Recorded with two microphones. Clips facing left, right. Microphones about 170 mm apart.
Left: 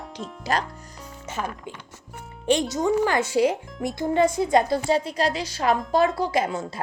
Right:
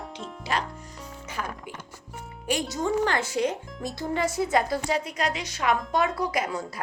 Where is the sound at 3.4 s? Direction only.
20° left (ahead or behind).